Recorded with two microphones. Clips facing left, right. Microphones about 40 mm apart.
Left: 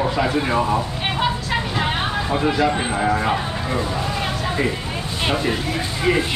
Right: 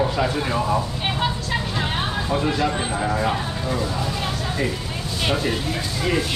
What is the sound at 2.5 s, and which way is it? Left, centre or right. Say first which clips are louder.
Speech: left 3 dB; centre.